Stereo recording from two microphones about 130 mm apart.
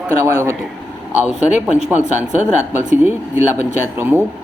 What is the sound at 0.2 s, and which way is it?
Speech, 20° right (ahead or behind).